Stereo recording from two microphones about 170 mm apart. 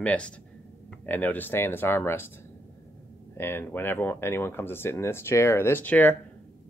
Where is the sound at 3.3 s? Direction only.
15° left (ahead or behind).